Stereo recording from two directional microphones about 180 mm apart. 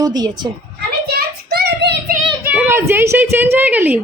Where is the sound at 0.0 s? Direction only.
20° right (ahead or behind).